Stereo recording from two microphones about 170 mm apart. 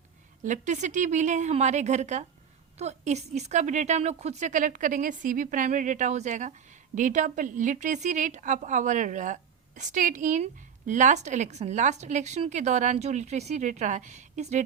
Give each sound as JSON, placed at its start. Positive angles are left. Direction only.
{"t": 0.4, "sound": "a woman's voice", "side_deg": -45}